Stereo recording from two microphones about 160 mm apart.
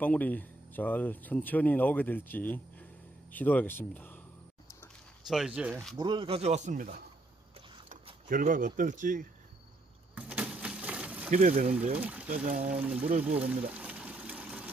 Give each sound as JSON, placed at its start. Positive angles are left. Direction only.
{"t": 0.0, "sound": "speech", "side_deg": 10}
{"t": 5.3, "sound": "speech", "side_deg": -5}
{"t": 5.9, "sound": "speech", "side_deg": -30}
{"t": 8.3, "sound": "a man's voice", "side_deg": -60}
{"t": 10.1, "sound": "a sound", "side_deg": -10}
{"t": 11.3, "sound": "speech", "side_deg": -45}
{"t": 12.0, "sound": "speech", "side_deg": -10}
{"t": 12.4, "sound": "a man's voice", "side_deg": -55}
{"t": 12.7, "sound": "speech", "side_deg": -5}
{"t": 13.4, "sound": "water", "side_deg": -10}